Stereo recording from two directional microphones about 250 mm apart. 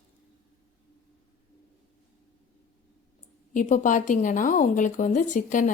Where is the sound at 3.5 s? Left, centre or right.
Left.